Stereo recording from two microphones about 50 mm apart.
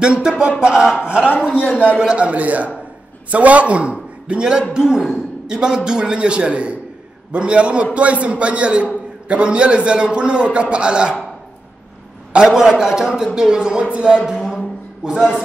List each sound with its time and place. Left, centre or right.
0.0 s a man's voice: centre
12.3 s a man's voice: centre